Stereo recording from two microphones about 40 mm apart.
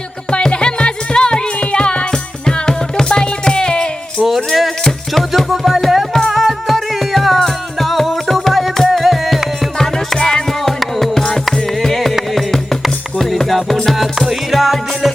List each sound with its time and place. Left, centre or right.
0.3 s music: left
4.2 s music: centre
4.8 s music: centre
5.5 s music: centre
9.7 s music: centre
13.9 s music: centre